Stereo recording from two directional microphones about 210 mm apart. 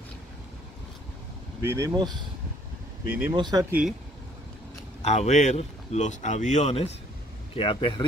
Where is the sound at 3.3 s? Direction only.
20° right (ahead or behind).